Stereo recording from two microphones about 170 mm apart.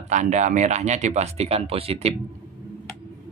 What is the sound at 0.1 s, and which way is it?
Speech, 45° right (ahead or behind).